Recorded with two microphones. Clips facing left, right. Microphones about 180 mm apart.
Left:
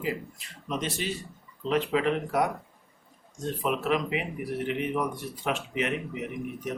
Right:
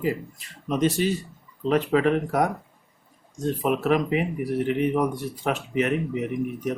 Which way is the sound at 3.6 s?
45° right (ahead or behind).